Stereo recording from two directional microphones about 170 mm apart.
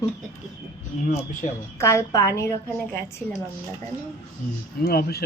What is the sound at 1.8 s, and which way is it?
Speech, 15° left (ahead or behind).